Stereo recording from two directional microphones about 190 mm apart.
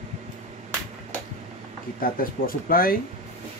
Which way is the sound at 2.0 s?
50° left (ahead or behind).